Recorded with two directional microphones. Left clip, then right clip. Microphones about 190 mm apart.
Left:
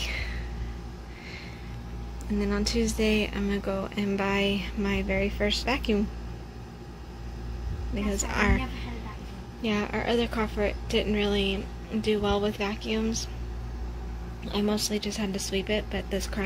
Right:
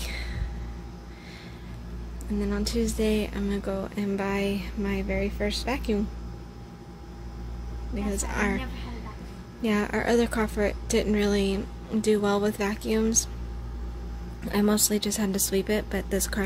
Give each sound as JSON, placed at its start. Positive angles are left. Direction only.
{"t": 0.0, "sound": "a sound", "side_deg": -10}
{"t": 2.4, "sound": "speech", "side_deg": -10}
{"t": 7.9, "sound": "speech", "side_deg": -5}
{"t": 9.7, "sound": "a woman's voice", "side_deg": -25}
{"t": 14.5, "sound": "speech", "side_deg": -40}